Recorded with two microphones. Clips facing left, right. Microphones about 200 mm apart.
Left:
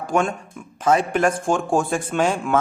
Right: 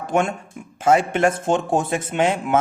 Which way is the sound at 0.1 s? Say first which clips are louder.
Even; 20° right (ahead or behind).